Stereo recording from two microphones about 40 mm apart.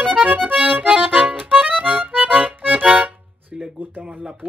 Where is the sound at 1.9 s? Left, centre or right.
Right.